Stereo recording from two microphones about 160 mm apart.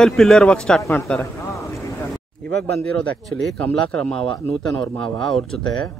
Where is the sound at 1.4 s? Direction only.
20° left (ahead or behind).